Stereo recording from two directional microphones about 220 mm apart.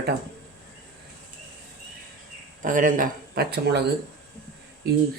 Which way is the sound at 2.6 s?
35° right (ahead or behind).